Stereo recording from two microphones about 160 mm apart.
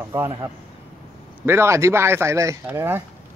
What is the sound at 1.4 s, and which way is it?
Speech, 15° right (ahead or behind).